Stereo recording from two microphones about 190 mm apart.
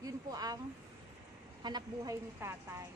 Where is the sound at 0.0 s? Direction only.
20° right (ahead or behind).